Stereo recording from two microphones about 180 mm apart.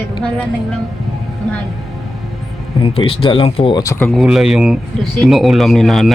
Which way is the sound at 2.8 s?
30° left (ahead or behind).